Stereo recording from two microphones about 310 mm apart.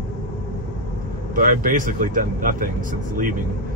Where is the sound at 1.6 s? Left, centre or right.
Right.